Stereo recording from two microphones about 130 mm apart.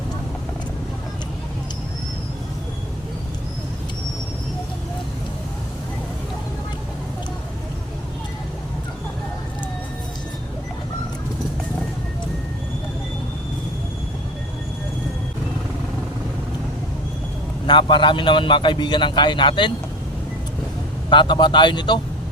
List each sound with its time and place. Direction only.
17.7 s a man's voice: 40° left (ahead or behind)
21.1 s a man's voice: 35° left (ahead or behind)